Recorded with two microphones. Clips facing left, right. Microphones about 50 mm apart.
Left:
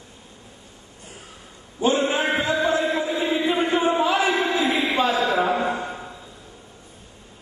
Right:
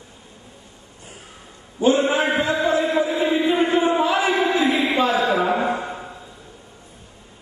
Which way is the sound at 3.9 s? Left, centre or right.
Right.